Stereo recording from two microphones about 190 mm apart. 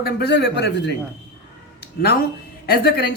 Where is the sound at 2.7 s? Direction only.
55° left (ahead or behind).